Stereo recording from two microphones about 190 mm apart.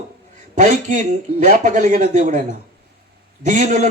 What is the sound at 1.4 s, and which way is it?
Speech, 40° right (ahead or behind).